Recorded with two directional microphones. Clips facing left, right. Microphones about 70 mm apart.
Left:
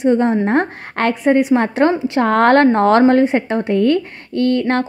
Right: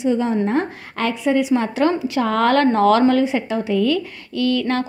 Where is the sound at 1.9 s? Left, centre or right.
Left.